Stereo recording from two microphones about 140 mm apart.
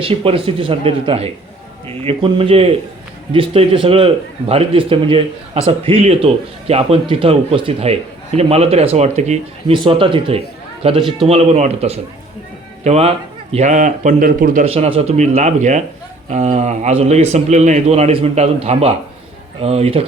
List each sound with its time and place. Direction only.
0.0 s speech: 40° right (ahead or behind)
9.7 s a man's voice: 35° right (ahead or behind); by 14.6 s 85° right
14.6 s speech: 45° right (ahead or behind)